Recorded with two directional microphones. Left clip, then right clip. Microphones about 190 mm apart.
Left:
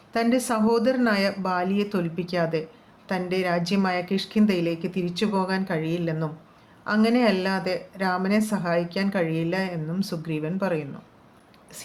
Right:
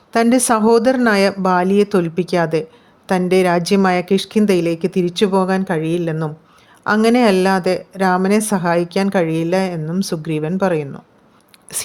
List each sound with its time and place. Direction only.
0.1 s speech: 55° right (ahead or behind)